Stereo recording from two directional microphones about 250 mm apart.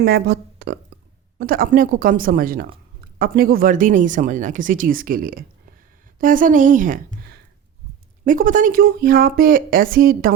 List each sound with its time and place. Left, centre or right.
0.0 s speech: right